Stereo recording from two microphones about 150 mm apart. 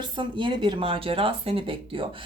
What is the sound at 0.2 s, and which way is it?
Speech, 35° right (ahead or behind).